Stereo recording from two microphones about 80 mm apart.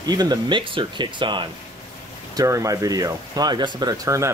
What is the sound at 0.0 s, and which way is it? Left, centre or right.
Speech, right.